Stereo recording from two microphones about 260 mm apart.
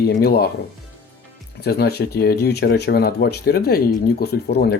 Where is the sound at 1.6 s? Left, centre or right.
Left.